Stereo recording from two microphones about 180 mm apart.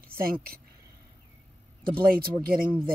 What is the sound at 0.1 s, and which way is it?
Speech, 55° right (ahead or behind).